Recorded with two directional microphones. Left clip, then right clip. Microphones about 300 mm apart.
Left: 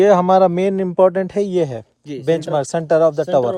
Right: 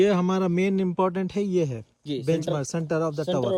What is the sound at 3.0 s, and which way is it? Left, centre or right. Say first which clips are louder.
Speech: left 13 dB; left.